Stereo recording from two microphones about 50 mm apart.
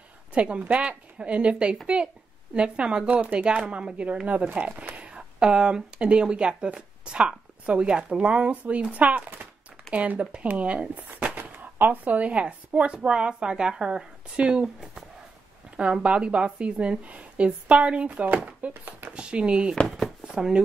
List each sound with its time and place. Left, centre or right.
0.3 s speech: right
11.4 s speech: right; by 14.7 s centre
15.7 s speech: right
18.7 s speech: right
19.1 s speech: right